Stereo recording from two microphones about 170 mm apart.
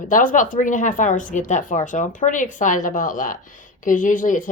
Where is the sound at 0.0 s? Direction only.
50° left (ahead or behind).